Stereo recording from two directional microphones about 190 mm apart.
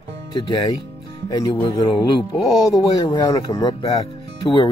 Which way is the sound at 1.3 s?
25° left (ahead or behind).